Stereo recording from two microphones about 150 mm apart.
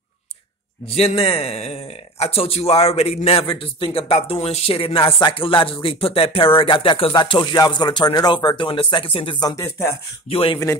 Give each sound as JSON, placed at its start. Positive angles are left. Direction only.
{"t": 0.8, "sound": "speech", "side_deg": 45}